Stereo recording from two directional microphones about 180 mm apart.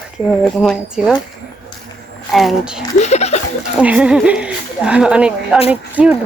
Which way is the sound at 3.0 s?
40° left (ahead or behind).